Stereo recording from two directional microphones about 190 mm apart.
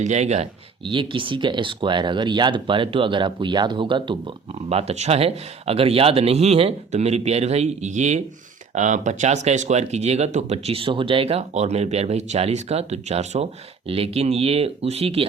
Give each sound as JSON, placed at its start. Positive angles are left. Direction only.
{"t": 0.0, "sound": "speech", "side_deg": -35}